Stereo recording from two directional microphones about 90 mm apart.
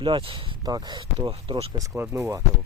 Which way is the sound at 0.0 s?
75° right (ahead or behind).